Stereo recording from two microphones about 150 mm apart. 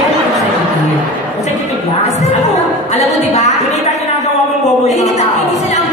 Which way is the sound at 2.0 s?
50° left (ahead or behind).